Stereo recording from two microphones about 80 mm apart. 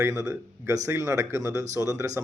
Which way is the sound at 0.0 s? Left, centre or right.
Right.